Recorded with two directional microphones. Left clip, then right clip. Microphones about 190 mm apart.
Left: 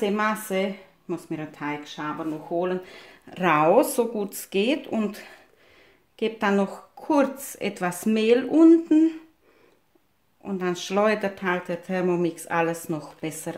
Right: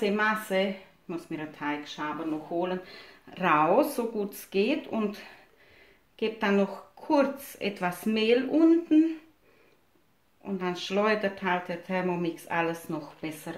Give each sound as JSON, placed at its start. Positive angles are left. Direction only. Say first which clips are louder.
{"t": 0.0, "sound": "speech", "louder": "left 2 dB", "side_deg": 45}
{"t": 10.4, "sound": "speech", "louder": "left 4 dB", "side_deg": 50}